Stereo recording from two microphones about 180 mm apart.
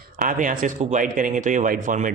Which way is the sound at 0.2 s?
45° right (ahead or behind).